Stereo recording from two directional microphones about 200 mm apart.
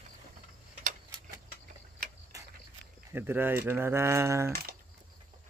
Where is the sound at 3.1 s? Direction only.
10° right (ahead or behind).